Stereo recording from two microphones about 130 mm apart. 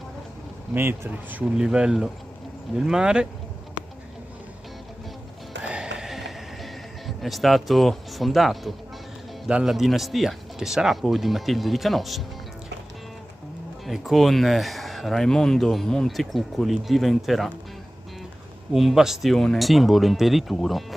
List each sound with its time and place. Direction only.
0.7 s speech: 20° right (ahead or behind)
1.5 s speech: 5° right (ahead or behind)
5.6 s music: 5° right (ahead or behind)
9.5 s speech: 5° right (ahead or behind)
13.8 s speech: centre (ahead or behind)
18.7 s speech: centre (ahead or behind)